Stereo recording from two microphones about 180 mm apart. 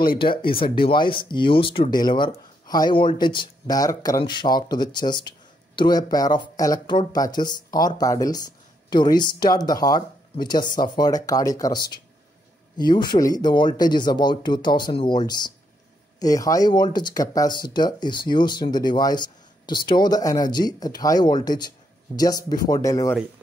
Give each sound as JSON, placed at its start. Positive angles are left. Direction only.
{"t": 0.2, "sound": "speech", "side_deg": 30}